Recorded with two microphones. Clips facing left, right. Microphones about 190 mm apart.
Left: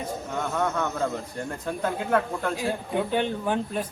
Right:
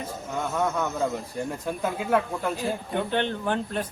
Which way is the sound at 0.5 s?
5° right (ahead or behind).